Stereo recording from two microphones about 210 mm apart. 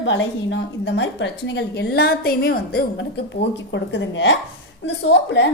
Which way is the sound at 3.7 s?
60° left (ahead or behind).